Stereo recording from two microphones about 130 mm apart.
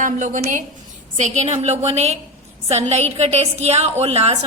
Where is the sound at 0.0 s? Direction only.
75° right (ahead or behind).